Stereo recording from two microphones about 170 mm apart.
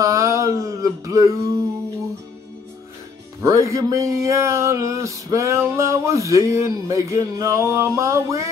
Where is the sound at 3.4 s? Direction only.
20° right (ahead or behind).